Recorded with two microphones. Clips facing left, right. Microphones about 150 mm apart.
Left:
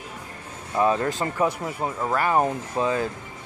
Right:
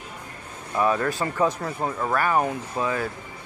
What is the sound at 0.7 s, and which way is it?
Speech, 25° left (ahead or behind).